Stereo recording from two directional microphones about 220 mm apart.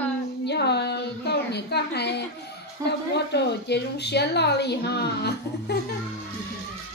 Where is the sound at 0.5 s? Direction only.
50° left (ahead or behind).